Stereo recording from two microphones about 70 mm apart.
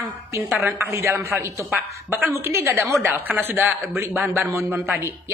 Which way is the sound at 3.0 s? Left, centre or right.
Right.